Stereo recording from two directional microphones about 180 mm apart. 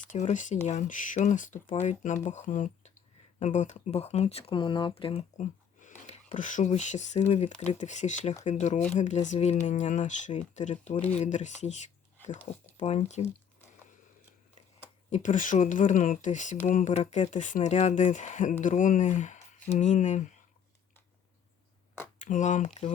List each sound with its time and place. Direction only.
0.1 s speech: 40° left (ahead or behind)
10.9 s speech: 10° left (ahead or behind)
11.2 s speech: 40° left (ahead or behind)
15.1 s speech: 45° left (ahead or behind)
22.2 s speech: 45° left (ahead or behind)